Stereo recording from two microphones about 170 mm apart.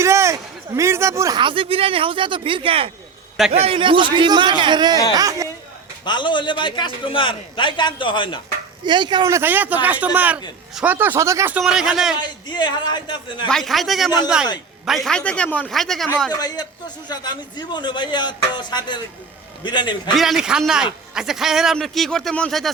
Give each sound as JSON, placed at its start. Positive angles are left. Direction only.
{"t": 0.0, "sound": "speech", "side_deg": -15}
{"t": 6.1, "sound": "a man's voice", "side_deg": 25}
{"t": 8.8, "sound": "speech", "side_deg": -25}
{"t": 12.2, "sound": "a man's voice", "side_deg": 25}
{"t": 13.5, "sound": "a man's voice", "side_deg": 0}
{"t": 16.3, "sound": "a man's voice", "side_deg": 25}
{"t": 20.1, "sound": "a man's voice", "side_deg": 0}